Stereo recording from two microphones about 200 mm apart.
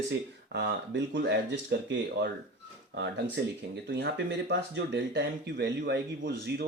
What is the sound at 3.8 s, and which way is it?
Speech, 60° right (ahead or behind).